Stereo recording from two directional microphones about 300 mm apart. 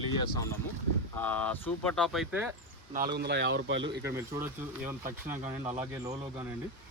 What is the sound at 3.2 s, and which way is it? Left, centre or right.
Speech, right.